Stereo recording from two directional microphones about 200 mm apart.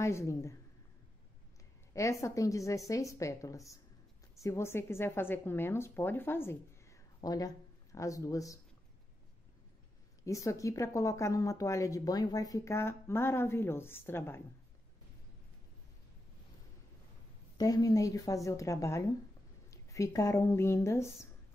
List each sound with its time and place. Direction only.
0.0 s speech: 15° left (ahead or behind)
2.0 s a woman's voice: 15° left (ahead or behind)
10.2 s speech: 15° left (ahead or behind)
17.6 s speech: 20° left (ahead or behind)